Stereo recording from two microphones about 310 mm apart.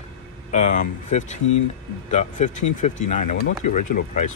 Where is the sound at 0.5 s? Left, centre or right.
Left.